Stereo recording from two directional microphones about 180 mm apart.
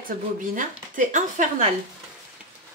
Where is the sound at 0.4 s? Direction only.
45° right (ahead or behind).